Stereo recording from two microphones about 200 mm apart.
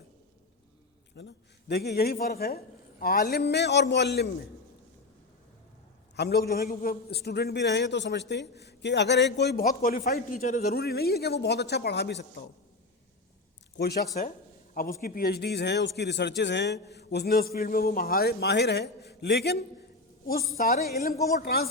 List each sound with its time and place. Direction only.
1.1 s a man's voice: 55° left (ahead or behind)
6.1 s speech: 55° left (ahead or behind)
13.7 s a man's voice: 55° left (ahead or behind)
20.8 s a man's voice: 50° left (ahead or behind)